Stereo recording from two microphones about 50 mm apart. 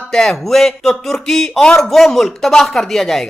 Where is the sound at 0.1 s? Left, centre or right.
Centre.